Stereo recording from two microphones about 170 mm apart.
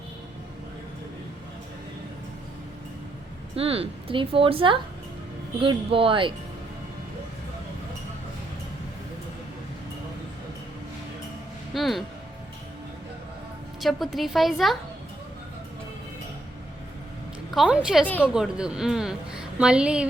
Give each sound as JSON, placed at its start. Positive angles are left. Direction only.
{"t": 3.5, "sound": "speech", "side_deg": -35}
{"t": 11.7, "sound": "music", "side_deg": 0}
{"t": 13.8, "sound": "a woman's voice", "side_deg": 0}
{"t": 17.5, "sound": "a woman's voice", "side_deg": 0}
{"t": 18.0, "sound": "a woman's voice", "side_deg": 10}
{"t": 18.3, "sound": "a woman's voice", "side_deg": -5}